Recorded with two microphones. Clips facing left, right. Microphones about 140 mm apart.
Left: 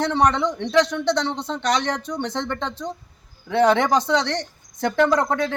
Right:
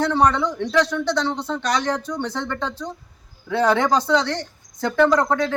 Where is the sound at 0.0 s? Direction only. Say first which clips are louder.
Right 1 dB; 20° left (ahead or behind).